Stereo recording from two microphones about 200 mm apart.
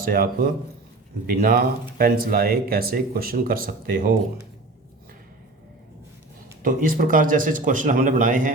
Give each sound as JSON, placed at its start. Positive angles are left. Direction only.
{"t": 0.1, "sound": "speech", "side_deg": -45}
{"t": 6.6, "sound": "speech", "side_deg": -45}